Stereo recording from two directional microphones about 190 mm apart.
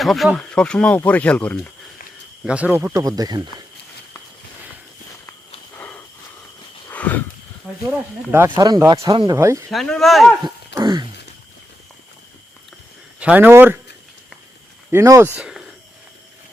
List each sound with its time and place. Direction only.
0.0 s speech: centre (ahead or behind)
2.4 s speech: 5° right (ahead or behind)
5.7 s walk: 10° left (ahead or behind)
6.9 s a sound: 10° left (ahead or behind)
7.9 s speech: 10° right (ahead or behind)
9.6 s speech: 5° left (ahead or behind)
10.8 s wail: 25° right (ahead or behind)
13.1 s speech: 5° right (ahead or behind)
14.8 s speech: 15° right (ahead or behind)